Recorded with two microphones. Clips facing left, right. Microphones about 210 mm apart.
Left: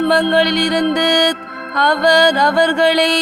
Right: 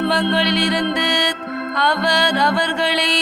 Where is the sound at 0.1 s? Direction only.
45° left (ahead or behind).